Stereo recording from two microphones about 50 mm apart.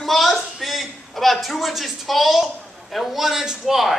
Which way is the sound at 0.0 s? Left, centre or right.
Centre.